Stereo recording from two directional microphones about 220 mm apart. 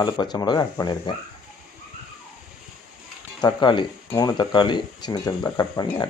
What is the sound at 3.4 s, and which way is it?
Speech, 20° left (ahead or behind).